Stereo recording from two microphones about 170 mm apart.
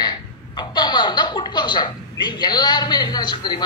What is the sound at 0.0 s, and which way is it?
Speech, 25° left (ahead or behind).